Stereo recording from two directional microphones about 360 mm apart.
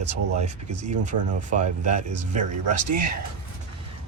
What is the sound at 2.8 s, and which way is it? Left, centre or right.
Speech, right.